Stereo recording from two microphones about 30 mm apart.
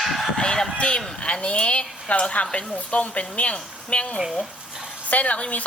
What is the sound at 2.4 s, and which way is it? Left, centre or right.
A woman's voice, left.